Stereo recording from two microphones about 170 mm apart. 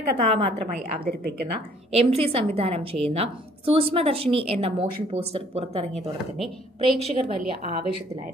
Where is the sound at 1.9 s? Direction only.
35° right (ahead or behind).